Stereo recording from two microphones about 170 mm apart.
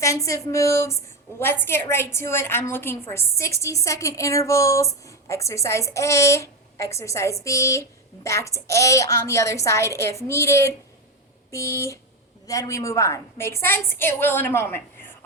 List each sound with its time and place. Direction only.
0.0 s a woman's voice: 20° left (ahead or behind)